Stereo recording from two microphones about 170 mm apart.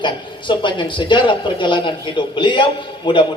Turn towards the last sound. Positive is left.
turn(degrees=30)  # may be behind; listen again after turning